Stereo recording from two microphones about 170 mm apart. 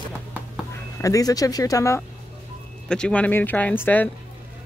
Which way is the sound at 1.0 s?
20° left (ahead or behind).